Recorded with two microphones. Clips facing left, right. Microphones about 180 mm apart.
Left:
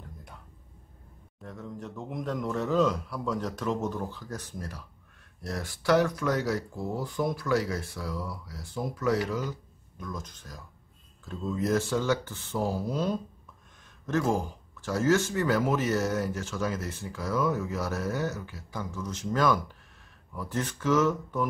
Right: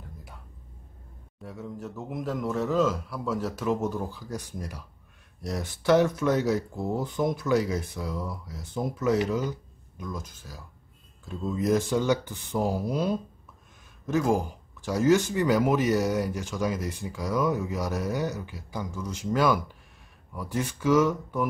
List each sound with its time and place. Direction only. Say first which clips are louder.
1.4 s a man's voice: right 2 dB; 5° right (ahead or behind)